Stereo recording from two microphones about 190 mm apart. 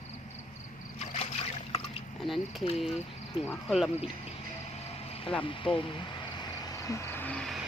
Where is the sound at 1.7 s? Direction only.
30° left (ahead or behind).